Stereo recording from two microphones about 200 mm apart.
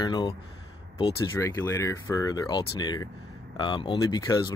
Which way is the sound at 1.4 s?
15° left (ahead or behind).